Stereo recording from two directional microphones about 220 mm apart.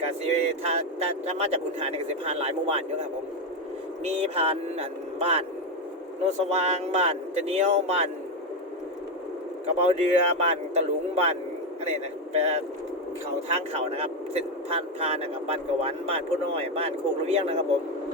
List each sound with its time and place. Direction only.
0.0 s speech: 30° right (ahead or behind)
9.8 s speech: 30° right (ahead or behind)